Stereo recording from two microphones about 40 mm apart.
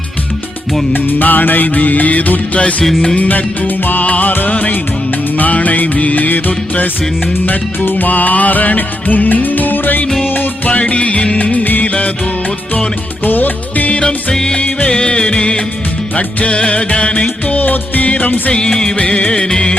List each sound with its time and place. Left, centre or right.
0.9 s music: left
10.7 s music: left
11.5 s music of bollywood: left
11.9 s music: left
13.2 s music: left
13.9 s music: left
14.3 s music of bollywood: centre
14.8 s music: left
17.4 s music: left
18.7 s music of bollywood: centre
18.9 s music: left